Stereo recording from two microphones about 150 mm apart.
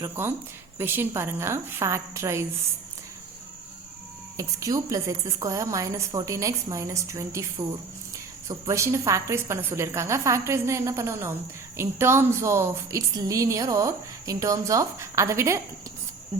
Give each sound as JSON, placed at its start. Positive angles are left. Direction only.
{"t": 0.0, "sound": "a woman's voice", "side_deg": -15}
{"t": 4.4, "sound": "a woman's voice", "side_deg": -20}
{"t": 8.4, "sound": "a woman's voice", "side_deg": -20}